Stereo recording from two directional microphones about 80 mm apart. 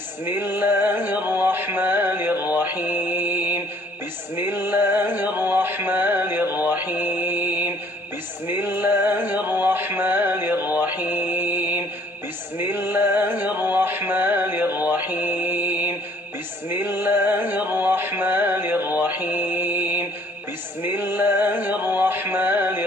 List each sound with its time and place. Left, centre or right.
0.2 s music: right